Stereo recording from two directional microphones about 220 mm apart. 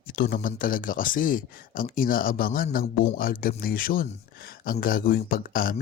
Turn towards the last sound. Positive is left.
turn(degrees=40)  # may be behind; listen again after turning